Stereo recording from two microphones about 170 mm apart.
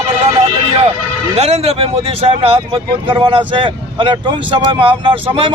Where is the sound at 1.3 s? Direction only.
40° right (ahead or behind).